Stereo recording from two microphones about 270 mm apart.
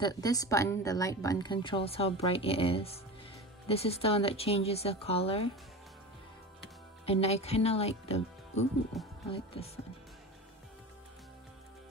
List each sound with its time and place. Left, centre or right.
0.0 s a woman's voice: centre
7.1 s a woman's voice: left
9.0 s speech: centre
9.3 s a woman's voice: centre